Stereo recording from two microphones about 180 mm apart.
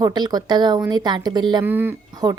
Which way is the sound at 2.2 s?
20° right (ahead or behind).